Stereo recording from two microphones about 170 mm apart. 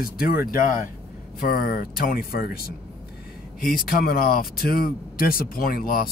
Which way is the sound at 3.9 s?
60° left (ahead or behind).